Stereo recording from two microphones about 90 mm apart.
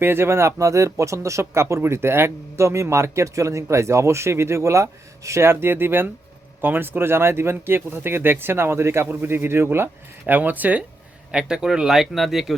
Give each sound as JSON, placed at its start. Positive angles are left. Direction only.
{"t": 0.0, "sound": "speech", "side_deg": -25}